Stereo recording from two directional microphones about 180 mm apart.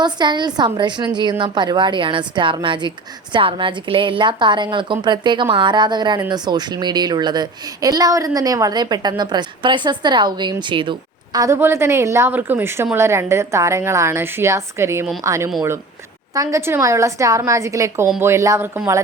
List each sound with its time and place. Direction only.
0.0 s a woman's voice: 25° right (ahead or behind)
11.3 s a woman's voice: 15° right (ahead or behind)